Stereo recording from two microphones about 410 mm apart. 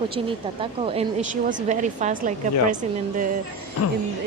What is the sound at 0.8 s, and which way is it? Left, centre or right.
Speech, centre.